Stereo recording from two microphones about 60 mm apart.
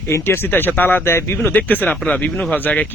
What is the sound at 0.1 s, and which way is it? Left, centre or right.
Speech, left.